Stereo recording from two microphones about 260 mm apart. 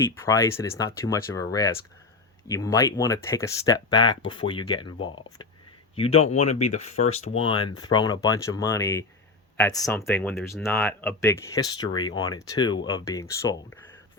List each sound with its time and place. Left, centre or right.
0.0 s speech: centre